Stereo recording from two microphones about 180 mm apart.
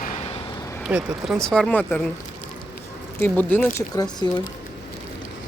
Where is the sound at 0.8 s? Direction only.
5° right (ahead or behind).